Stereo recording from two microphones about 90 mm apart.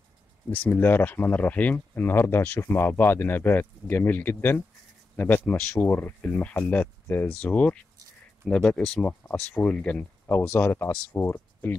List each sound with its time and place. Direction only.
0.5 s speech: 20° left (ahead or behind)
10.6 s speech: 25° left (ahead or behind)